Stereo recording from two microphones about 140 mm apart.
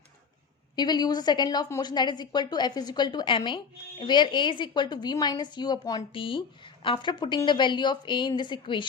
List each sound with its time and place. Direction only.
0.8 s a woman's voice: 30° left (ahead or behind)